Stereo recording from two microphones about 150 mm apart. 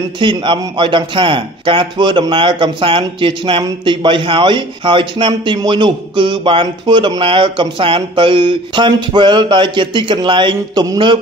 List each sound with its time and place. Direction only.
0.2 s speech: 35° right (ahead or behind)